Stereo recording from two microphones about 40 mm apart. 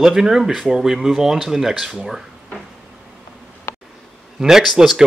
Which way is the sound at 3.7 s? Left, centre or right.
Left.